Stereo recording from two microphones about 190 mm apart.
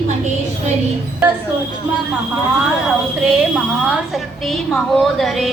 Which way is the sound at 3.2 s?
5° right (ahead or behind).